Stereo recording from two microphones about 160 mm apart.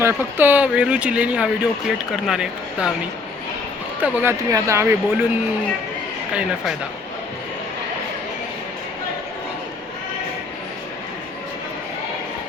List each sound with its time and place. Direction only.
0.0 s speech: 15° right (ahead or behind)
4.0 s speech: 15° right (ahead or behind)